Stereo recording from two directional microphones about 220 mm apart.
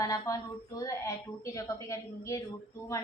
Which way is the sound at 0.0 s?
15° left (ahead or behind).